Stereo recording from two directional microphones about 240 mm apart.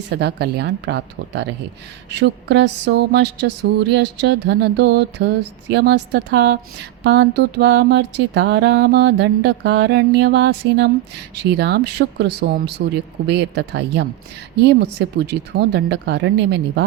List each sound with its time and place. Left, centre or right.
0.1 s music: right